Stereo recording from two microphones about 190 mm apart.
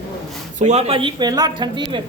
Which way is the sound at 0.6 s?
35° right (ahead or behind).